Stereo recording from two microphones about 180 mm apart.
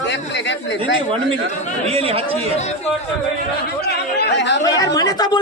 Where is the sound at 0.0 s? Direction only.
75° left (ahead or behind).